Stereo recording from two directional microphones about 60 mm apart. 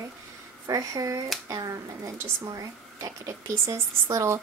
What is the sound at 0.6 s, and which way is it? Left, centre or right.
A woman's voice, right.